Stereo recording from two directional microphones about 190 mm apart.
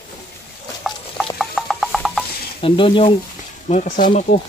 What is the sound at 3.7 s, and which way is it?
Speech, 40° left (ahead or behind).